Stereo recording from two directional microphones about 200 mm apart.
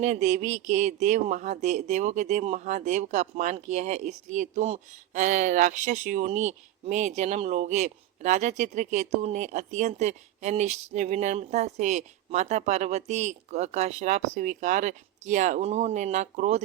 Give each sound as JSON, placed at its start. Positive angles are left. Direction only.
{"t": 0.0, "sound": "speech", "side_deg": -35}